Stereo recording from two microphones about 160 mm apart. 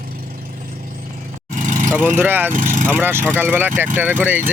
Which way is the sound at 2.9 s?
15° right (ahead or behind).